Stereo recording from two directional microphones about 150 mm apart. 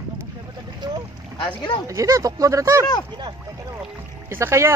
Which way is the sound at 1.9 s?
20° right (ahead or behind).